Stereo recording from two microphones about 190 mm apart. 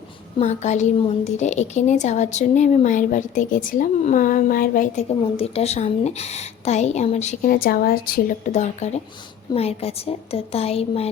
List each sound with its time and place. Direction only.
0.3 s a woman's voice: 35° left (ahead or behind)
7.5 s a woman's voice: 50° left (ahead or behind); by 11.1 s 30° left (ahead or behind)